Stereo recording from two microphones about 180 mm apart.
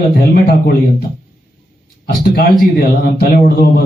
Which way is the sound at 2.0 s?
55° left (ahead or behind).